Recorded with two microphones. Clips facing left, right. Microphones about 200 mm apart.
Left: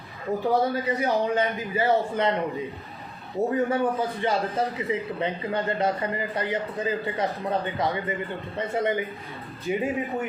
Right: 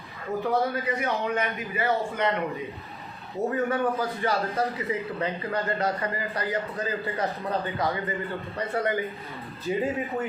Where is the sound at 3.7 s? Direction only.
25° left (ahead or behind).